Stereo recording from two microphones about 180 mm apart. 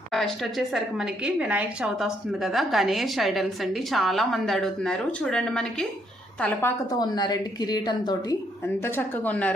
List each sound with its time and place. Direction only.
0.1 s a woman's voice: centre (ahead or behind); by 8.4 s 20° left (ahead or behind)
8.6 s speech: 10° left (ahead or behind)